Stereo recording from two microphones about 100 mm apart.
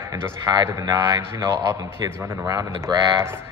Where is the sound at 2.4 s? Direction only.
35° right (ahead or behind).